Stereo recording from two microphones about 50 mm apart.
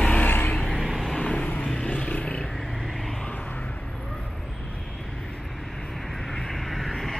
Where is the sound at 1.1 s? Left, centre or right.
Left.